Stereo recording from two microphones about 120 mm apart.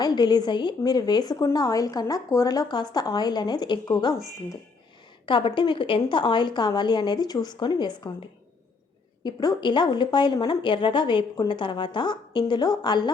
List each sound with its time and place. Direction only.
0.0 s a woman's voice: 35° left (ahead or behind)
5.2 s a woman's voice: 45° left (ahead or behind)
9.2 s a woman's voice: 35° left (ahead or behind)